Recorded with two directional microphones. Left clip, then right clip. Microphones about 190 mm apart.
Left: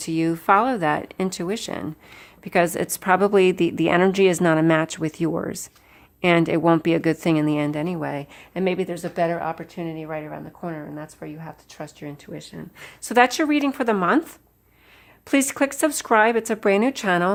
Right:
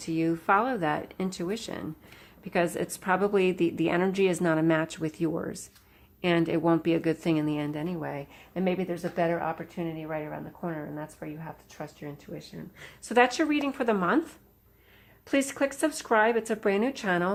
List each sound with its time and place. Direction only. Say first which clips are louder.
0.0 s a woman's voice: left 6 dB; 40° left (ahead or behind)